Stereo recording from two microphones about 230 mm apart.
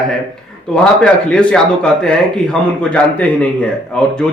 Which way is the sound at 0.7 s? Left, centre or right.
Centre.